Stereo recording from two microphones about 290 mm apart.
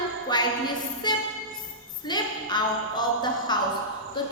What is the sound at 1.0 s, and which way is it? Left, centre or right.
Music, centre.